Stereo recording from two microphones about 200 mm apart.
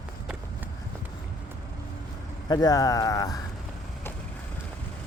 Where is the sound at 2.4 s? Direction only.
20° left (ahead or behind).